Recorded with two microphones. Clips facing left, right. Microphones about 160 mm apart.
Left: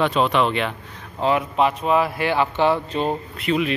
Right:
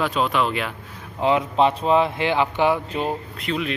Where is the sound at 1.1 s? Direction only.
20° right (ahead or behind).